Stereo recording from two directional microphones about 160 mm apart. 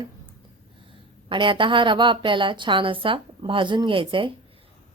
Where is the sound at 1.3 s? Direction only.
30° right (ahead or behind).